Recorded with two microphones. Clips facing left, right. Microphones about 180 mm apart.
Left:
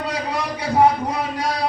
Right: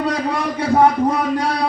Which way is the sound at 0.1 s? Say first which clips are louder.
Right 4 dB; 50° right (ahead or behind).